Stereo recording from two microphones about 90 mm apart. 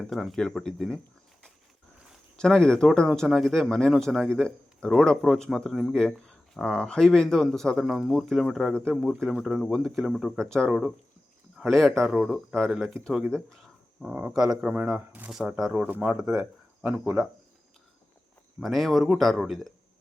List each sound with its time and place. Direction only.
0.0 s speech: centre (ahead or behind)
2.3 s speech: 10° left (ahead or behind)
10.7 s speech: 5° right (ahead or behind)
13.3 s speech: 5° left (ahead or behind)
14.0 s speech: 20° right (ahead or behind)
14.3 s speech: 5° right (ahead or behind)
14.7 s speech: 15° right (ahead or behind)
18.6 s speech: centre (ahead or behind)